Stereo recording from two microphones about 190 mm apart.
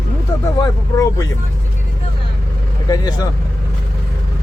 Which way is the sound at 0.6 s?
20° left (ahead or behind).